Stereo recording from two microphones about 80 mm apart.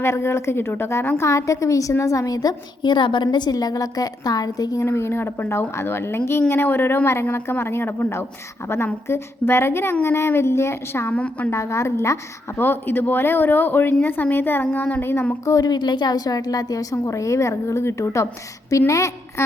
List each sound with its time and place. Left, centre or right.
0.0 s a woman's voice: left
4.9 s a woman's voice: left
11.1 s a woman's voice: centre
11.5 s a woman's voice: left
15.4 s a woman's voice: left